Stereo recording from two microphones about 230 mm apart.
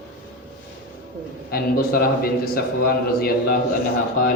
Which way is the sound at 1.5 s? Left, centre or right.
Left.